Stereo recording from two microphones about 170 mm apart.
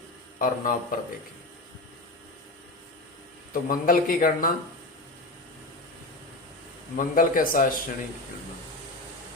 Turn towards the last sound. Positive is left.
turn(degrees=55)  # may be behind; listen again after turning